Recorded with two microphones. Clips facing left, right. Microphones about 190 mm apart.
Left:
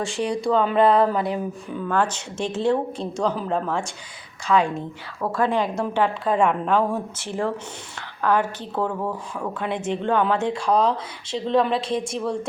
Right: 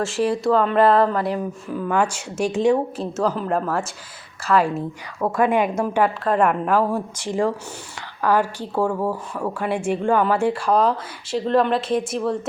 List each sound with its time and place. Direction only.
0.0 s speech: centre (ahead or behind)
1.9 s a woman's voice: 10° right (ahead or behind)
3.2 s a woman's voice: centre (ahead or behind)
5.2 s a woman's voice: 15° right (ahead or behind)